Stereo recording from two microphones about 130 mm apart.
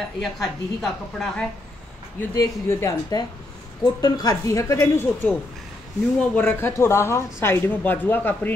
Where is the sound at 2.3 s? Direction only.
25° left (ahead or behind).